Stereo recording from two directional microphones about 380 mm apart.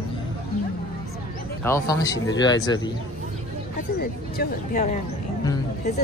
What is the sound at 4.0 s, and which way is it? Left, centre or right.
Speech, left.